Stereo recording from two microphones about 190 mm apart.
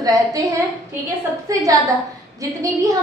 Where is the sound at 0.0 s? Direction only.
20° right (ahead or behind).